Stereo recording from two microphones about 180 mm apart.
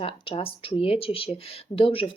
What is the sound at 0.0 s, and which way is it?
Speech, 30° left (ahead or behind).